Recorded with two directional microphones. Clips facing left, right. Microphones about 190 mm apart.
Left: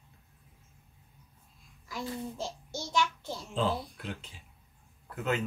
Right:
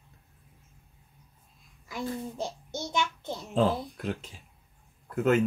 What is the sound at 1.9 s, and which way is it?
A child's voice, 20° right (ahead or behind).